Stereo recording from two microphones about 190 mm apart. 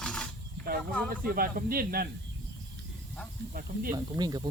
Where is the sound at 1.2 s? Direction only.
50° right (ahead or behind).